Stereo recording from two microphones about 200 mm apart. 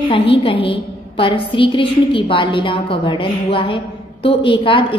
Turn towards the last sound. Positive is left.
turn(degrees=25)  # may be behind; listen again after turning